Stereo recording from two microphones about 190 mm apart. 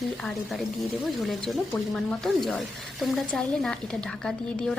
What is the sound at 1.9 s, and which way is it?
A woman's voice, centre (ahead or behind).